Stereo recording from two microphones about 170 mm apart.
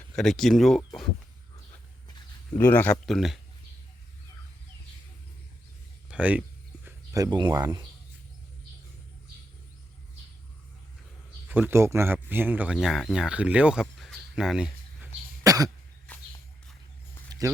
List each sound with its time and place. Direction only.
0.2 s speech: centre (ahead or behind)
2.6 s speech: 10° left (ahead or behind)
6.1 s speech: 10° right (ahead or behind)
6.8 s speech: 20° right (ahead or behind)
11.4 s speech: 10° right (ahead or behind)
15.4 s cough: 20° right (ahead or behind)
17.3 s a sound: 20° right (ahead or behind)